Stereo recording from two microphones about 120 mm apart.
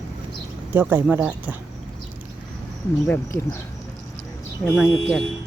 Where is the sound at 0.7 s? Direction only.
15° right (ahead or behind).